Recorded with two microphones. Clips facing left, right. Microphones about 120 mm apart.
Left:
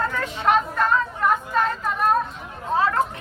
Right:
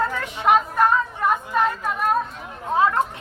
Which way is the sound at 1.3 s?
15° right (ahead or behind).